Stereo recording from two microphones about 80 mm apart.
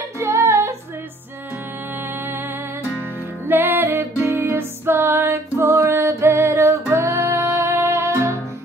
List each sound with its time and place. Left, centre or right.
0.2 s music: right
2.0 s music: right